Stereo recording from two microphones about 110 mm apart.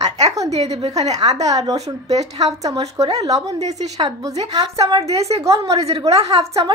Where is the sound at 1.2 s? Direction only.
80° right.